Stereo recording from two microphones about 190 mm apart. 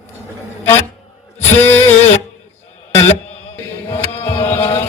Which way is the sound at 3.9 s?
30° left (ahead or behind).